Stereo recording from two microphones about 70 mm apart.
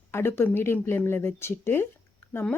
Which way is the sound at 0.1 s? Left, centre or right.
Left.